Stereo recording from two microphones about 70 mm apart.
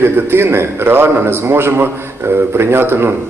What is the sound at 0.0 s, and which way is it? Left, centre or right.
Speech, right.